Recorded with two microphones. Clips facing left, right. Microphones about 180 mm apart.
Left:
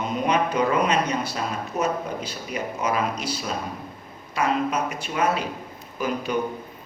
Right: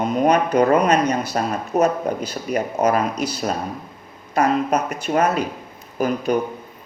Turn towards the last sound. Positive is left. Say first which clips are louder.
# right 6 dB
turn(degrees=-45)  # may be behind; listen again after turning